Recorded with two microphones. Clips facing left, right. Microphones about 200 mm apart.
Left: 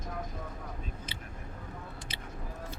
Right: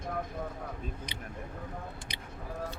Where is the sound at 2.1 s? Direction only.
15° right (ahead or behind).